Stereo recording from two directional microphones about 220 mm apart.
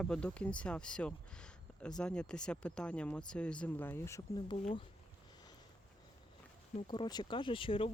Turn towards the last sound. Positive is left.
turn(degrees=25)  # may be behind; listen again after turning